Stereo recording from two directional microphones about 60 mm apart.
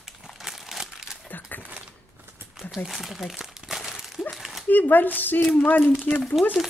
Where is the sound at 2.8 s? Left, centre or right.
Centre.